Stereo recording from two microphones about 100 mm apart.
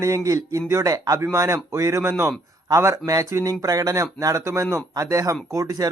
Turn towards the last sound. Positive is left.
turn(degrees=-35)  # may be behind; listen again after turning